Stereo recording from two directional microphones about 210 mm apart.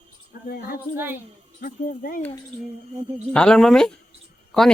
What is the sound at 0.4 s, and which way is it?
Speech, 45° left (ahead or behind).